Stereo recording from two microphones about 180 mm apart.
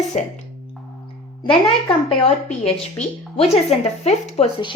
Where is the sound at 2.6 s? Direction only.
35° left (ahead or behind).